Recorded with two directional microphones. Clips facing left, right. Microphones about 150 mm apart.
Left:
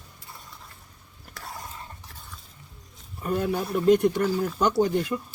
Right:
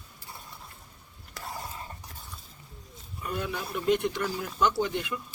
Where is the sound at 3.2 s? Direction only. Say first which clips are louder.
Left 7 dB; 40° left (ahead or behind).